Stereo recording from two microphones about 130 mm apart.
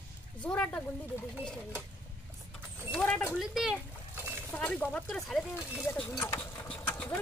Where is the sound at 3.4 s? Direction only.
Centre (ahead or behind).